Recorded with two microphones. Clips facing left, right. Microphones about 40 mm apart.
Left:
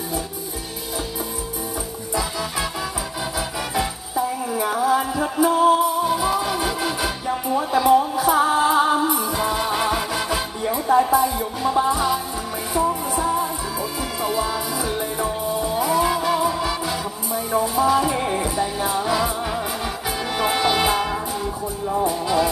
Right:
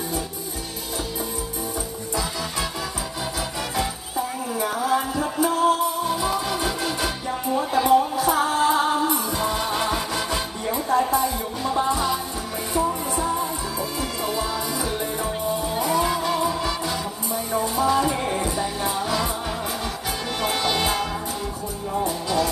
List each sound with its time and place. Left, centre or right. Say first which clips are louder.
4.5 s music: left 3 dB; centre
20.4 s music: left 4 dB; centre